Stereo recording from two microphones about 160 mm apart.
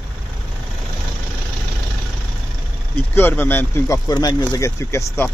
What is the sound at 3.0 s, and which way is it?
Speech, 10° left (ahead or behind).